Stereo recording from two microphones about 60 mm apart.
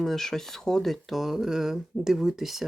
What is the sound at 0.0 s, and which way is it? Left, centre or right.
Speech, centre.